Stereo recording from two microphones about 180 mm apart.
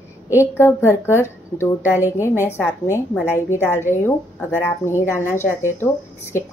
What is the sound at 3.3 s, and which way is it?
A woman's voice, 15° left (ahead or behind).